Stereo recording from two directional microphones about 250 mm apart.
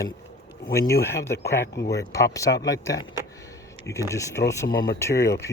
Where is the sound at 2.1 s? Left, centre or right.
Centre.